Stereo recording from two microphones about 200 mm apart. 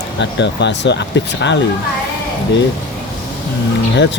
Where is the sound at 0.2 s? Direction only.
60° left (ahead or behind).